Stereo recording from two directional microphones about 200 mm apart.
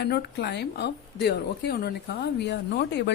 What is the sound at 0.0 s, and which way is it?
A woman's voice, 55° left (ahead or behind).